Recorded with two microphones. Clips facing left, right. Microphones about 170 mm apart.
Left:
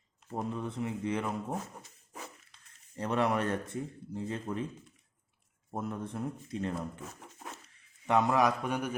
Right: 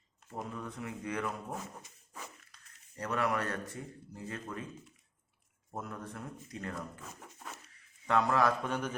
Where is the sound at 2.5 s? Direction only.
25° left (ahead or behind).